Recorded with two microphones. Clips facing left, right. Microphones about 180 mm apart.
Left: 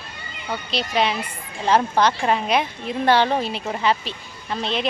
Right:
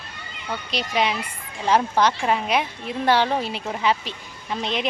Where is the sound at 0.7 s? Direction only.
10° right (ahead or behind).